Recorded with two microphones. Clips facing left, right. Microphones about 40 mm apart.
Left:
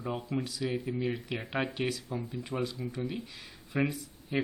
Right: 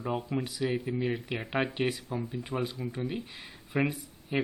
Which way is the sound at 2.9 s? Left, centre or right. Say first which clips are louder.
Right 1 dB; right.